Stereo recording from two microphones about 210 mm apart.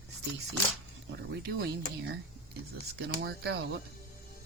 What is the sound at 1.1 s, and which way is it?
Speech, 55° right (ahead or behind).